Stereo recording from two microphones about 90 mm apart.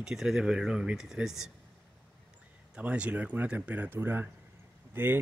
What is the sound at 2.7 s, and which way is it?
Speech, 15° right (ahead or behind).